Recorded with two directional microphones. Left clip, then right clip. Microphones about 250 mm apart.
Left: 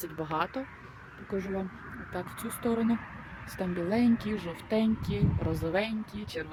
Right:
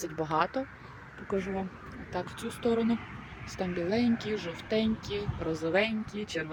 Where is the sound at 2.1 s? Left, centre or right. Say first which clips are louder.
Right 2 dB; centre.